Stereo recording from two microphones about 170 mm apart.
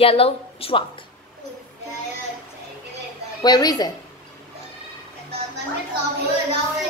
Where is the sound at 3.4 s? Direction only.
20° left (ahead or behind).